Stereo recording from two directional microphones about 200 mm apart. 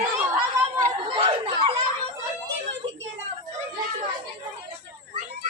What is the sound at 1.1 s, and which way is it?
Chatter, 25° right (ahead or behind).